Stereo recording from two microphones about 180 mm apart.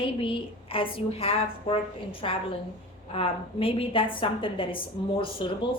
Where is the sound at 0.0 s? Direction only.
30° left (ahead or behind).